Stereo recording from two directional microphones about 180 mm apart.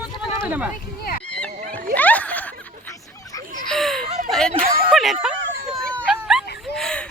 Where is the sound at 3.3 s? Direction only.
20° left (ahead or behind).